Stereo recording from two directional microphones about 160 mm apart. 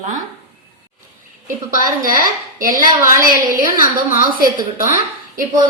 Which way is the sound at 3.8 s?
60° left (ahead or behind).